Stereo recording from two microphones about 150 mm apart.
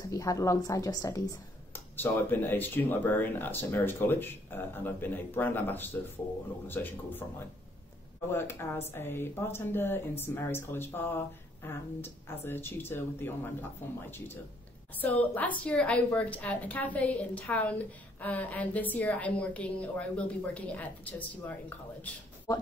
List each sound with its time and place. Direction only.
0.1 s a woman's voice: 20° left (ahead or behind)
22.5 s speech: 25° left (ahead or behind)